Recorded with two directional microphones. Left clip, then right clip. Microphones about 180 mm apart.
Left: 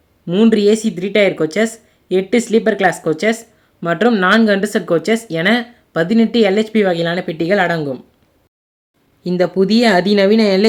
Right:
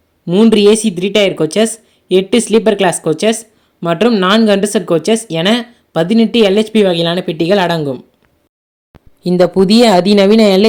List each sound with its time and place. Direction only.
0.3 s speech: 20° right (ahead or behind)
9.2 s speech: 20° right (ahead or behind)